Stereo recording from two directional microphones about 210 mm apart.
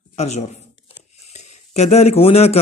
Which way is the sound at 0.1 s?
30° left (ahead or behind).